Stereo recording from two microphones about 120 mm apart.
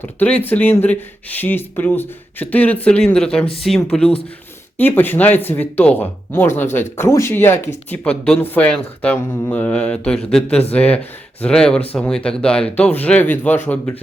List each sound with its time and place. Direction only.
0.0 s speech: 15° left (ahead or behind)
4.8 s speech: 15° left (ahead or behind)